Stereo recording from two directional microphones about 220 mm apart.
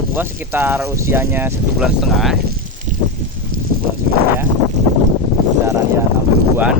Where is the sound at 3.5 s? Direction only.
70° right (ahead or behind).